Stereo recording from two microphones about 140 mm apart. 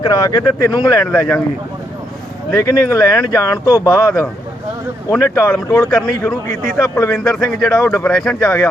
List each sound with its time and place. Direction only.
0.0 s speech: 30° left (ahead or behind)
1.0 s a man's voice: 15° left (ahead or behind)
2.5 s a man's voice: 20° left (ahead or behind)
6.7 s a man's voice: 15° left (ahead or behind)
8.0 s speech: 5° left (ahead or behind)
8.4 s speech: 20° left (ahead or behind)